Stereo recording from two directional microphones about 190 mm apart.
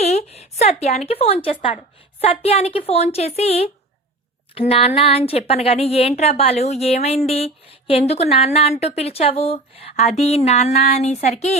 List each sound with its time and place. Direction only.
0.0 s a woman's voice: 35° left (ahead or behind)